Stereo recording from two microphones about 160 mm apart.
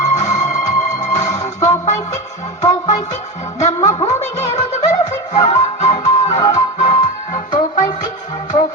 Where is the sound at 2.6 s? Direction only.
25° left (ahead or behind).